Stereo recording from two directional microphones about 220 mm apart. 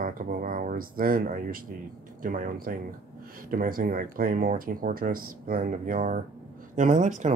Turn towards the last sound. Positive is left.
turn(degrees=-35)  # may be behind; listen again after turning